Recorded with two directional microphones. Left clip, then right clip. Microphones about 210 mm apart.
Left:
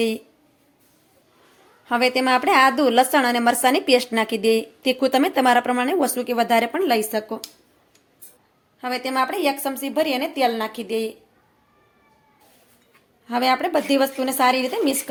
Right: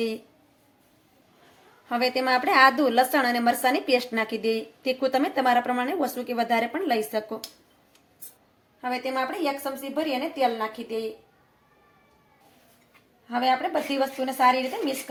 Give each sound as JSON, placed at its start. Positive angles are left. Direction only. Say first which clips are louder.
{"t": 1.9, "sound": "a woman's voice", "louder": "left 5 dB", "side_deg": 30}
{"t": 8.8, "sound": "a woman's voice", "louder": "left 5 dB", "side_deg": 45}
{"t": 13.2, "sound": "a woman's voice", "louder": "left 4 dB", "side_deg": 55}